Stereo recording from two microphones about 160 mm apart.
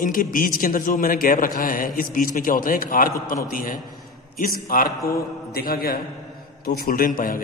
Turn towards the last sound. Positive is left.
turn(degrees=60)  # may be behind; listen again after turning